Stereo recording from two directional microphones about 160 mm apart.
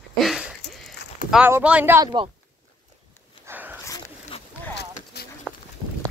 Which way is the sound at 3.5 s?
10° right (ahead or behind).